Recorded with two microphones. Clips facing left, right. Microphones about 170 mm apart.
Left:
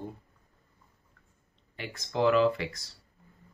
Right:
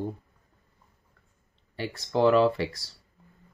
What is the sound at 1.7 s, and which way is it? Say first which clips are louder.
Speech: right 6 dB; 35° right (ahead or behind).